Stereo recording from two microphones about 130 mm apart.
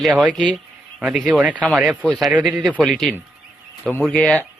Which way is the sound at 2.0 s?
10° left (ahead or behind).